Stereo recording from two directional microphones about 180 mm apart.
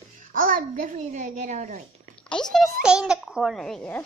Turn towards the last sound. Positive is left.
turn(degrees=5)  # may be behind; listen again after turning